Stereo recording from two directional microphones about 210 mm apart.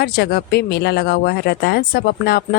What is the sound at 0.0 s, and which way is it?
Speech, 50° left (ahead or behind).